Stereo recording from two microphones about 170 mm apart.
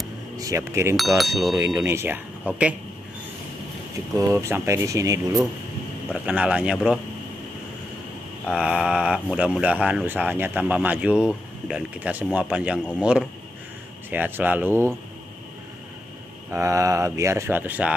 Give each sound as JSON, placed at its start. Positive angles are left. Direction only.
{"t": 0.4, "sound": "speech", "side_deg": -20}
{"t": 0.9, "sound": "a sound", "side_deg": 0}
{"t": 1.9, "sound": "speech", "side_deg": -15}
{"t": 4.2, "sound": "speech", "side_deg": -15}
{"t": 6.1, "sound": "speech", "side_deg": -10}
{"t": 8.5, "sound": "speech", "side_deg": -5}
{"t": 13.0, "sound": "a sound", "side_deg": -5}
{"t": 14.1, "sound": "speech", "side_deg": -10}
{"t": 16.4, "sound": "speech", "side_deg": -15}